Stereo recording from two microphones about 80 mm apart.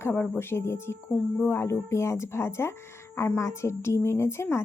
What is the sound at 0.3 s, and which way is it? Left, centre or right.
A woman's voice, left.